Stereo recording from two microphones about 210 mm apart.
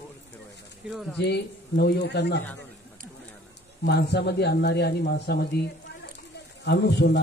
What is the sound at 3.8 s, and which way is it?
A man's voice, 50° left (ahead or behind).